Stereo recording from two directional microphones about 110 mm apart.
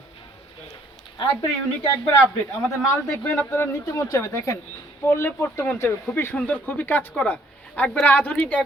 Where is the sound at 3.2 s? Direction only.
20° left (ahead or behind).